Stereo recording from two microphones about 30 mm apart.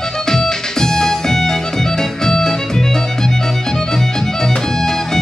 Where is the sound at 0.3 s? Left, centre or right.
Centre.